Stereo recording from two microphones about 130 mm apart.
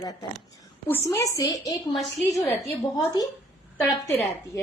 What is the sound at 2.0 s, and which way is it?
Speech, centre (ahead or behind).